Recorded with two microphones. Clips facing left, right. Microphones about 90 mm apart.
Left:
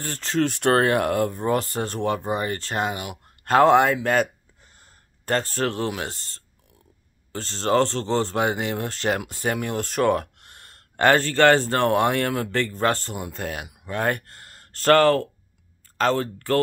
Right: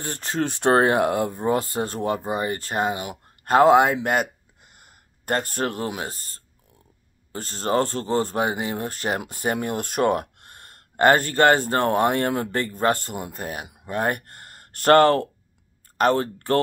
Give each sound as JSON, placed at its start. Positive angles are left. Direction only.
{"t": 0.0, "sound": "speech", "side_deg": -20}
{"t": 4.7, "sound": "a sound", "side_deg": -15}
{"t": 5.6, "sound": "speech", "side_deg": -15}